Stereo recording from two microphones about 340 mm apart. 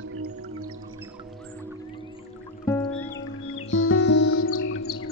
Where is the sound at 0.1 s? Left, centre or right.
Right.